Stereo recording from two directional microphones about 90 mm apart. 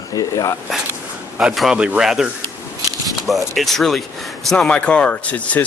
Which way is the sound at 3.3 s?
Centre (ahead or behind).